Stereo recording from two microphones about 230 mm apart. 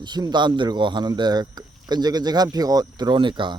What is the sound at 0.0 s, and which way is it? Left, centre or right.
Speech, centre.